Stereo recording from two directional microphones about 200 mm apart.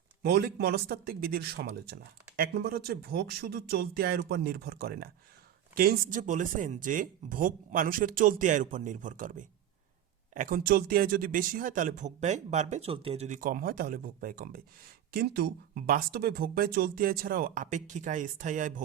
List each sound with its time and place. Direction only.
0.2 s speech: 55° right (ahead or behind)